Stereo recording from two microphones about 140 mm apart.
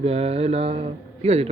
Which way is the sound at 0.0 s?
45° right (ahead or behind).